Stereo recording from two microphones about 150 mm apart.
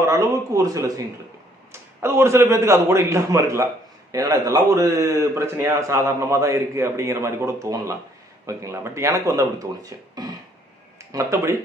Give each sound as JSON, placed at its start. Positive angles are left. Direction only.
{"t": 0.0, "sound": "a man's voice", "side_deg": -20}